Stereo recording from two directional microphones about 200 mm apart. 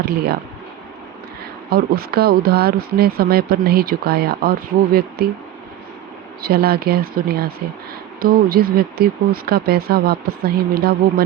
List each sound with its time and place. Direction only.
0.0 s speech: 50° right (ahead or behind)
1.7 s speech: 50° right (ahead or behind)
6.4 s speech: 50° right (ahead or behind)